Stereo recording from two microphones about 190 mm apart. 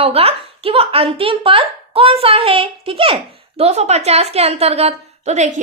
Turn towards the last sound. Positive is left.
turn(degrees=-35)  # may be behind; listen again after turning